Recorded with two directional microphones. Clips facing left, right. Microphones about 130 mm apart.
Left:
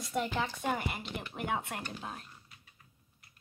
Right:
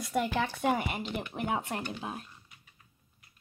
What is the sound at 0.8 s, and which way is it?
Speech, 5° right (ahead or behind).